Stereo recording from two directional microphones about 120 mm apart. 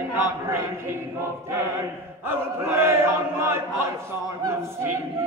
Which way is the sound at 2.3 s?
20° right (ahead or behind).